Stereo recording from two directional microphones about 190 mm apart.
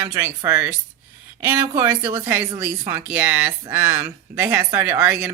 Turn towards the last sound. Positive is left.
turn(degrees=-10)  # may be behind; listen again after turning